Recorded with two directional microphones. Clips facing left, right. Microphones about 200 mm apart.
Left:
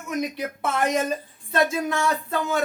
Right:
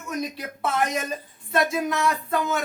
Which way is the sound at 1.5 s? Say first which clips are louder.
Left 1 dB; 30° left (ahead or behind).